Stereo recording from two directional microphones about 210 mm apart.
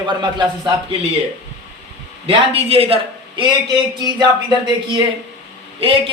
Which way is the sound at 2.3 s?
25° right (ahead or behind).